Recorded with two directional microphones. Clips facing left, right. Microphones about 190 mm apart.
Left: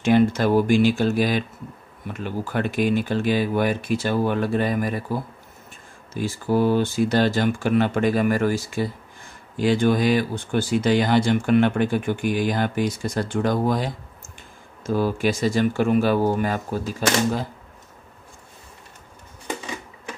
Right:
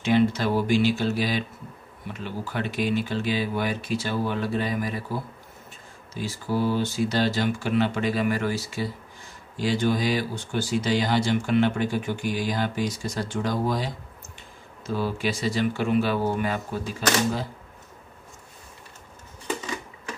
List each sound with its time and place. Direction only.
0.0 s speech: 50° left (ahead or behind)
6.1 s speech: 50° left (ahead or behind)